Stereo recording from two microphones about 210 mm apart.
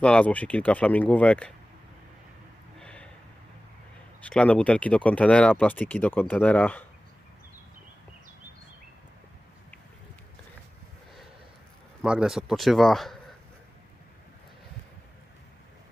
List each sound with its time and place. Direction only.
0.0 s speech: 5° left (ahead or behind)
2.7 s a sound: 5° left (ahead or behind)
4.2 s speech: 5° left (ahead or behind)
12.0 s speech: 5° right (ahead or behind)